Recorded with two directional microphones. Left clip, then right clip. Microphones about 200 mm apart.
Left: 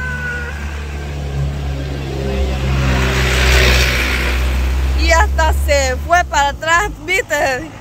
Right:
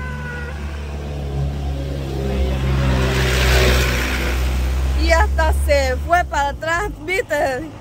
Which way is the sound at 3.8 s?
50° right (ahead or behind).